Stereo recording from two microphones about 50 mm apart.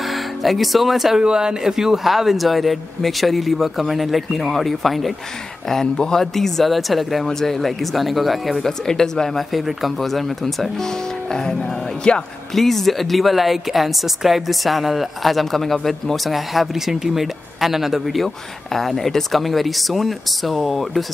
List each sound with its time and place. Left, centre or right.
0.0 s speech: centre
1.2 s speech: centre
5.7 s speech: centre
9.5 s speech: centre; by 12.2 s left
12.5 s speech: centre